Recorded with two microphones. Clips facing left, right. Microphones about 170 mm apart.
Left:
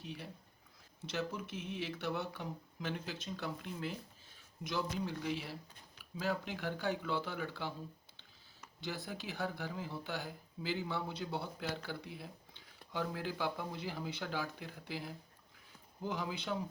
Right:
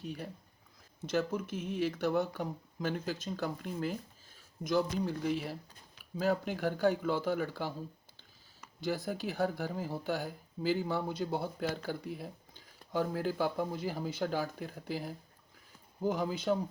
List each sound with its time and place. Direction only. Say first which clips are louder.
0.0 s speech: right 6 dB; 45° right (ahead or behind)
8.8 s speech: right 8 dB; 45° right (ahead or behind)